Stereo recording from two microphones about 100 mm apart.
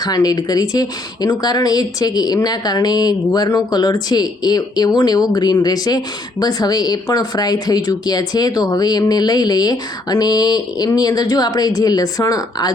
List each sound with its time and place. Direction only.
0.0 s speech: 40° left (ahead or behind)